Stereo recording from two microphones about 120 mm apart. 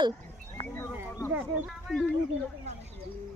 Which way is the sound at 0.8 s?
20° left (ahead or behind).